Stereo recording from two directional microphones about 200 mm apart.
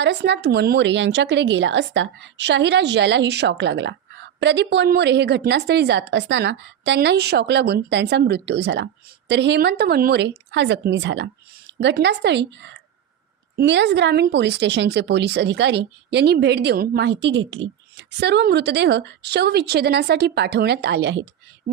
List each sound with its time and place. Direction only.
0.0 s speech: 60° right (ahead or behind)